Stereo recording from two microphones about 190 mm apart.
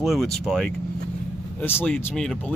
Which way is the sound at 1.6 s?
10° left (ahead or behind).